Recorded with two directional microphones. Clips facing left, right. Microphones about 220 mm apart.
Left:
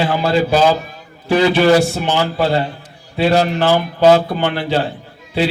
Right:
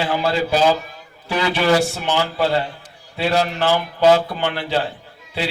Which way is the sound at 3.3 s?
40° left (ahead or behind).